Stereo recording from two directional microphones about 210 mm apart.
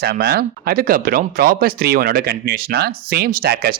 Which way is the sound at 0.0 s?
50° right (ahead or behind).